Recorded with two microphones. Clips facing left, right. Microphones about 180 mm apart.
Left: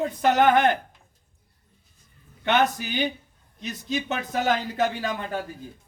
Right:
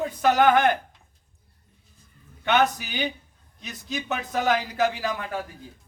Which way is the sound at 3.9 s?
25° left (ahead or behind).